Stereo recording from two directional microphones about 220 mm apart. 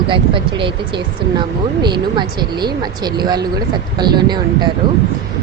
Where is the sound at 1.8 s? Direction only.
20° right (ahead or behind).